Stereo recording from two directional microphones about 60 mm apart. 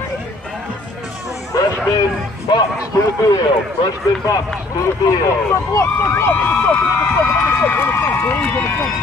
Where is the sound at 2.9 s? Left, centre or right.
Left.